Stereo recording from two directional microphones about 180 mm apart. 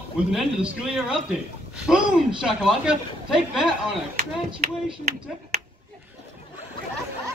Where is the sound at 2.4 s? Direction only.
5° right (ahead or behind).